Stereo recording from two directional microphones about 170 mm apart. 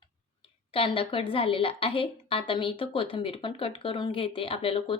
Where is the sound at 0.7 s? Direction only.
35° left (ahead or behind).